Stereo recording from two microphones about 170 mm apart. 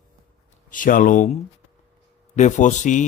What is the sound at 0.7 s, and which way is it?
Speech, 50° left (ahead or behind).